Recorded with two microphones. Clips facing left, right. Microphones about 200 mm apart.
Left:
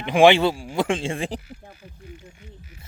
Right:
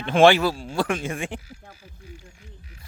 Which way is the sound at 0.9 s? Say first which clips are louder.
Left 2 dB; 30° left (ahead or behind).